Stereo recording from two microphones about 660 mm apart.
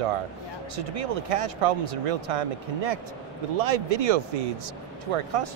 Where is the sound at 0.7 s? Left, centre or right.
Right.